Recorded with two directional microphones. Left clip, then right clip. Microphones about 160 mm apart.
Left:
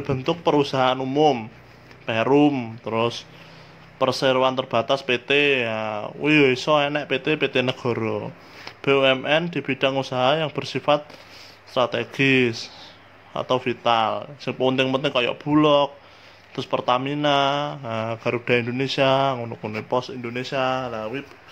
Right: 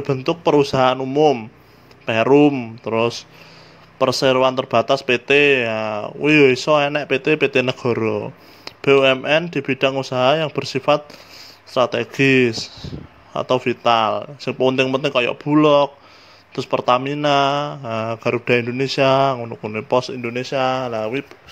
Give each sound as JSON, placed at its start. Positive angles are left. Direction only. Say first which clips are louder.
{"t": 0.0, "sound": "speech", "louder": "right 4 dB", "side_deg": -40}